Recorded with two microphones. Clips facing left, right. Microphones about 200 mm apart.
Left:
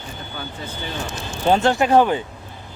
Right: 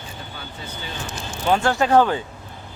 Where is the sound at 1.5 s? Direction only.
20° left (ahead or behind).